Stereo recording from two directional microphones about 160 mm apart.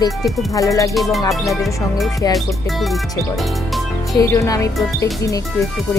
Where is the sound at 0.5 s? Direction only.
20° left (ahead or behind).